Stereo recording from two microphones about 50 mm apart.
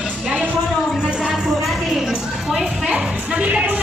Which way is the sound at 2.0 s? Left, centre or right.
Centre.